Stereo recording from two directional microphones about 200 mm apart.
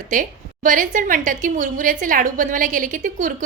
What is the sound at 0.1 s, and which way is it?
A woman's voice, 40° right (ahead or behind).